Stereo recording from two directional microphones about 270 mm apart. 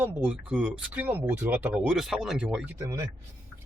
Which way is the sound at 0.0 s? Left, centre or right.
Centre.